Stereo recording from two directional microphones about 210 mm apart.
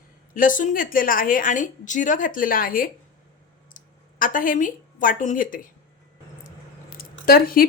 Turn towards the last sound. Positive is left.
turn(degrees=45)  # may be behind; listen again after turning